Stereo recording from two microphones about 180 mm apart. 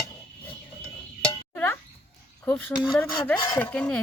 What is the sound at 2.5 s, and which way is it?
Speech, 10° left (ahead or behind).